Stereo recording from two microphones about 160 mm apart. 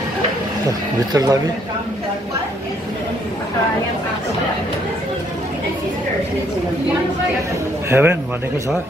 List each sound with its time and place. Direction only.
1.1 s speech: 25° right (ahead or behind)
7.9 s a man's voice: 15° right (ahead or behind)